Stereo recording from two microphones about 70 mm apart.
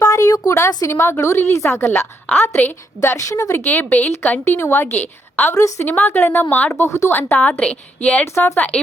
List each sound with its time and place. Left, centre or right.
0.0 s a sound: left
0.4 s a woman's voice: left
2.3 s a woman's voice: left
3.0 s speech: left
3.6 s a woman's voice: left
5.5 s a woman's voice: left
5.8 s a woman's voice: left